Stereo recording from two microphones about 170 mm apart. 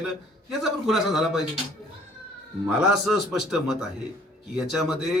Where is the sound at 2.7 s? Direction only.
5° right (ahead or behind).